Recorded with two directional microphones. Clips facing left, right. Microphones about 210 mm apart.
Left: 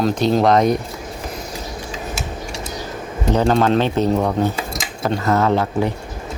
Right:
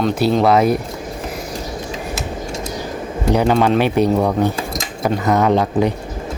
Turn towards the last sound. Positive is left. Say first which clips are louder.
# right 3 dB
turn(degrees=-15)  # may be behind; listen again after turning